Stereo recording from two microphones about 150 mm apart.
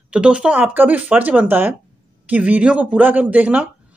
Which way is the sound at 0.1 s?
5° right (ahead or behind).